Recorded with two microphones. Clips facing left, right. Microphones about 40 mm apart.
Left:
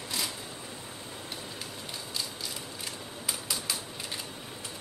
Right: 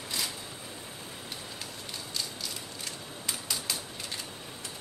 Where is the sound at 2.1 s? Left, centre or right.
Centre.